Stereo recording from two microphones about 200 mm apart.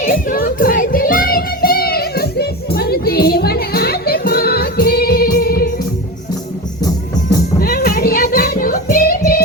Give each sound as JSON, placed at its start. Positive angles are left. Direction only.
{"t": 0.0, "sound": "music", "side_deg": 45}
{"t": 7.6, "sound": "child singing", "side_deg": 45}